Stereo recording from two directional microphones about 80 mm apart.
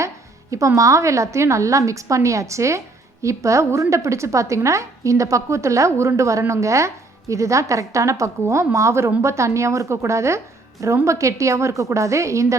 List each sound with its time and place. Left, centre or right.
0.8 s a woman's voice: right